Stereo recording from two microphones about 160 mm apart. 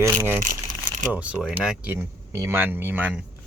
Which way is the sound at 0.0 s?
15° right (ahead or behind).